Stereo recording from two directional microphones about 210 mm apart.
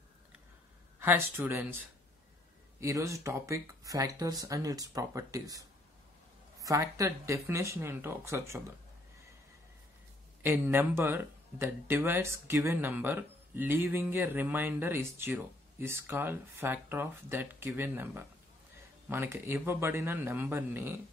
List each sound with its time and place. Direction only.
0.9 s speech: 10° right (ahead or behind)
2.8 s speech: 15° right (ahead or behind)
10.4 s speech: 10° right (ahead or behind)